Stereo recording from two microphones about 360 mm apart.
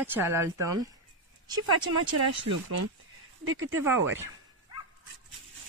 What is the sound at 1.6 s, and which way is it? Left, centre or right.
Speech, right.